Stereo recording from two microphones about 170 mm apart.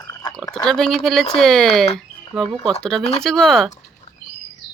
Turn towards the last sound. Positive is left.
turn(degrees=0)  # may be behind; listen again after turning